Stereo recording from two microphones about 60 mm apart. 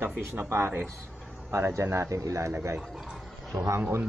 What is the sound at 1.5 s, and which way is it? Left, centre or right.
Speech, right.